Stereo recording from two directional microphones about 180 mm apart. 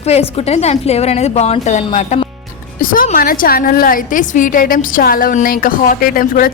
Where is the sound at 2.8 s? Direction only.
50° left (ahead or behind).